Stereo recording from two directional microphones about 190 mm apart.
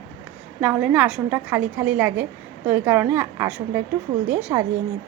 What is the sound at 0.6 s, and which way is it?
A woman's voice, 10° right (ahead or behind).